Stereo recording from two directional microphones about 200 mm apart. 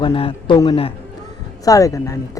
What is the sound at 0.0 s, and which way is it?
A man's voice, 25° left (ahead or behind).